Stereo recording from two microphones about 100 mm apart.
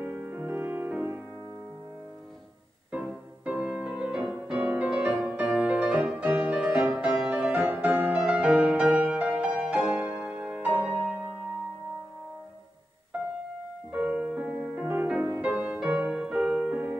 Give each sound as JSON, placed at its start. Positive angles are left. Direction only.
{"t": 0.0, "sound": "music", "side_deg": -15}
{"t": 2.9, "sound": "music", "side_deg": -10}
{"t": 13.9, "sound": "music", "side_deg": -10}